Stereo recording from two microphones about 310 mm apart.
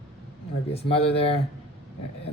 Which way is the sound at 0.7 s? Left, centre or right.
Centre.